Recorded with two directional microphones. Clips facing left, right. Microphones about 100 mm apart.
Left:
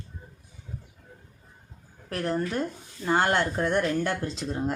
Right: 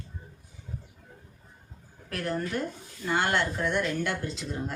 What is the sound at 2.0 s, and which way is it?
Speech, 30° left (ahead or behind).